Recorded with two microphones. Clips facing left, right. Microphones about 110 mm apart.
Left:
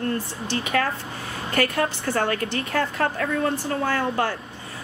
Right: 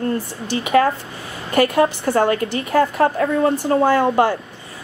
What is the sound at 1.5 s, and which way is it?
A woman's voice, 15° right (ahead or behind).